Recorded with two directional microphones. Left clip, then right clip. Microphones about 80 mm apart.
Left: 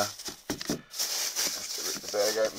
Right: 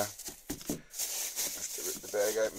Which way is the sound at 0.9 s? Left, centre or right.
Centre.